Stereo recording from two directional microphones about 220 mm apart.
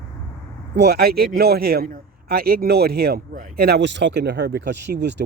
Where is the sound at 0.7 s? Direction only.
45° right (ahead or behind).